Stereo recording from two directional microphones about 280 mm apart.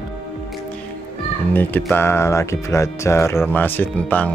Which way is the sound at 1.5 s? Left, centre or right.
Centre.